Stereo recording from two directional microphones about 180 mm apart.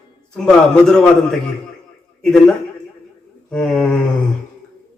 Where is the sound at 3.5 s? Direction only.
5° left (ahead or behind).